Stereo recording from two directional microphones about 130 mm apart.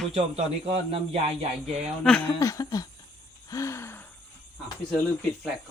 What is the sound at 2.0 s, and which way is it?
Speech, 5° left (ahead or behind).